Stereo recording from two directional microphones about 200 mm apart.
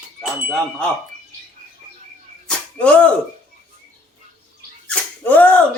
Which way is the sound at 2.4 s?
5° left (ahead or behind).